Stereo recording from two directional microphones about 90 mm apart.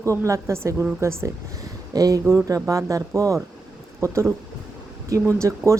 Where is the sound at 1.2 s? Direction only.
40° right (ahead or behind).